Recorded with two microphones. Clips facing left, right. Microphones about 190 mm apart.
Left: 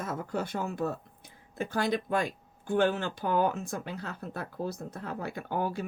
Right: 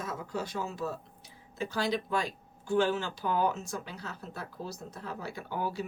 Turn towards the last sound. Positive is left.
turn(degrees=55)  # may be behind; listen again after turning